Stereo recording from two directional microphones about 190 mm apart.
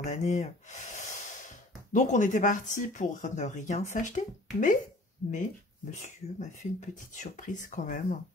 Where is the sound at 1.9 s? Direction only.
40° left (ahead or behind).